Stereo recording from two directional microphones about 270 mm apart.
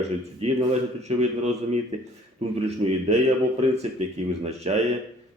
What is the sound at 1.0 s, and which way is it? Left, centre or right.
A man's voice, right.